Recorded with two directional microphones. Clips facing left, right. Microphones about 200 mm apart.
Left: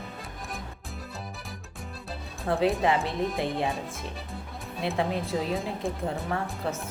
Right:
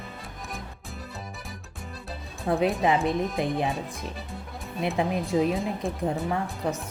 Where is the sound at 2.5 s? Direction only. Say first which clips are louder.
Right 1 dB; 15° right (ahead or behind).